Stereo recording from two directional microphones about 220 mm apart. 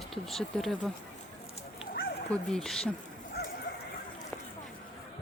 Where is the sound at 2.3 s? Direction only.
5° left (ahead or behind).